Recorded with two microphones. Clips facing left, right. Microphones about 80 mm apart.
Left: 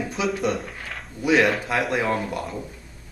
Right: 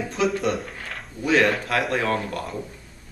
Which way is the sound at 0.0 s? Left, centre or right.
Centre.